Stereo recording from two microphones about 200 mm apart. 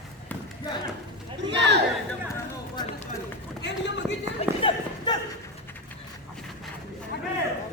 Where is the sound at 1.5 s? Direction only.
60° right (ahead or behind).